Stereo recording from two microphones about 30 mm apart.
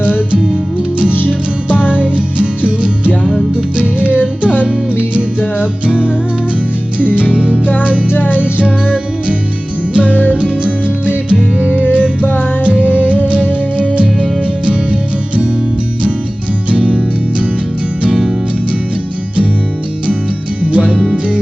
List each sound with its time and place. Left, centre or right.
1.3 s music: right
7.1 s music: right
9.9 s music: right
16.6 s music: right
20.7 s music: right